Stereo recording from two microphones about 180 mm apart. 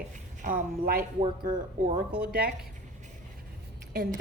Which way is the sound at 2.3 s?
55° right (ahead or behind).